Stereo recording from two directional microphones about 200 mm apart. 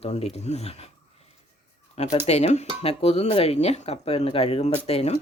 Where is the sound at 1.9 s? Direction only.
30° left (ahead or behind).